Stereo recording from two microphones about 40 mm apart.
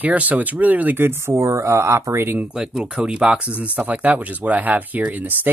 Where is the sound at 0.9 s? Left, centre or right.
Right.